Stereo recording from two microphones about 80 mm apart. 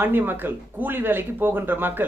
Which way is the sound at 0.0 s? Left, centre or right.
Right.